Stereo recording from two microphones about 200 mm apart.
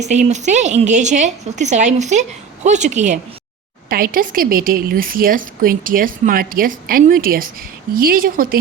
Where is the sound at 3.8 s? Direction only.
45° right (ahead or behind).